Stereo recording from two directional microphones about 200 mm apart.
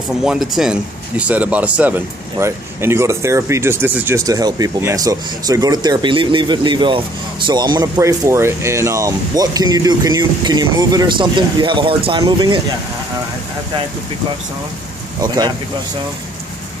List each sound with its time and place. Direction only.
0.2 s speech: 5° right (ahead or behind); by 12.6 s 25° right (ahead or behind)
15.2 s speech: 20° right (ahead or behind)